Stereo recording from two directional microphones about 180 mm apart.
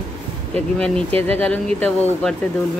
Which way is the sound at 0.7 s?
5° left (ahead or behind).